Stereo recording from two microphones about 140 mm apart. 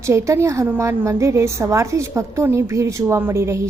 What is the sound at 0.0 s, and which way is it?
A woman's voice, 20° right (ahead or behind).